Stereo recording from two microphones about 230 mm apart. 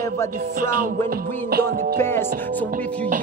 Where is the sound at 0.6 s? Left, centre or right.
Right.